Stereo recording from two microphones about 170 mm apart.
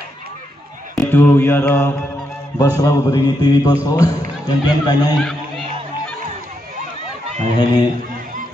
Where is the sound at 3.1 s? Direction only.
20° left (ahead or behind).